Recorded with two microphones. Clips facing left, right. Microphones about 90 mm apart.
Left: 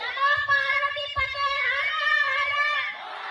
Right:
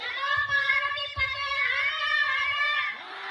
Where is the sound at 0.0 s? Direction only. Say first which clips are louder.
Left 5 dB; 65° left (ahead or behind).